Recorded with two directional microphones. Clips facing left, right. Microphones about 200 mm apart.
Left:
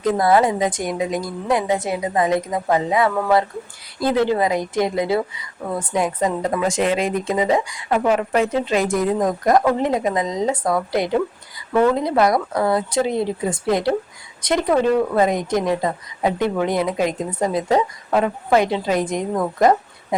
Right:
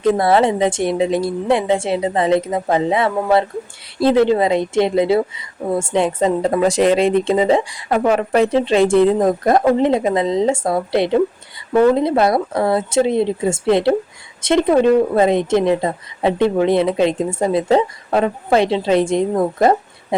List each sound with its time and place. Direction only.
0.0 s a woman's voice: 25° right (ahead or behind)